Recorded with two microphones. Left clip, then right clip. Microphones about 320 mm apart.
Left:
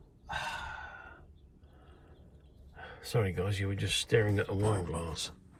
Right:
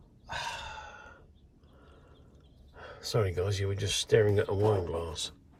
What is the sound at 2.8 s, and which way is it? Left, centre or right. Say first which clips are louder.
Speech: right 3 dB; centre.